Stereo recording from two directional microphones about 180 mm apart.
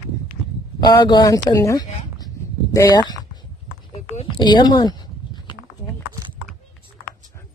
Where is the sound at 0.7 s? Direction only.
25° left (ahead or behind).